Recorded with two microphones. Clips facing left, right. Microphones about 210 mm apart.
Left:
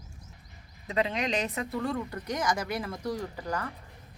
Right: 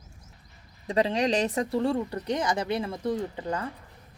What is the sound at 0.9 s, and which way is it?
Speech, 35° right (ahead or behind).